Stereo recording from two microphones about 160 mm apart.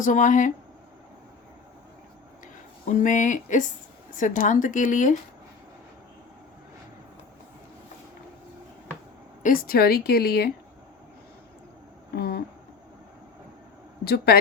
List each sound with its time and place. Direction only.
0.0 s speech: 55° left (ahead or behind)
2.8 s speech: 50° left (ahead or behind)
9.4 s a woman's voice: 60° left (ahead or behind)
12.1 s speech: 75° left (ahead or behind)
14.0 s a woman's voice: 75° left (ahead or behind)